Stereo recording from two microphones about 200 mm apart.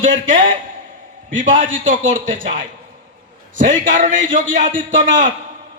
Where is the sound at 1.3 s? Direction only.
40° right (ahead or behind).